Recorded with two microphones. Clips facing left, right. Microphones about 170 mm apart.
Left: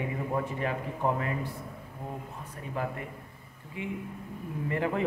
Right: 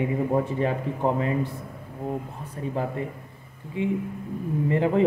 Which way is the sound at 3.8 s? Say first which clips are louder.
Right 10 dB; 25° right (ahead or behind).